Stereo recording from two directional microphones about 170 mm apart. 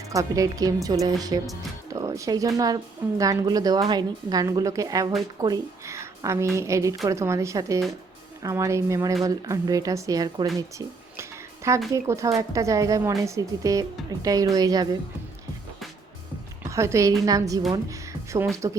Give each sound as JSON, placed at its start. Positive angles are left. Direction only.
{"t": 0.1, "sound": "a woman's voice", "side_deg": -20}
{"t": 16.6, "sound": "a woman's voice", "side_deg": -15}
{"t": 17.8, "sound": "music", "side_deg": -20}
{"t": 18.5, "sound": "a woman's voice", "side_deg": -20}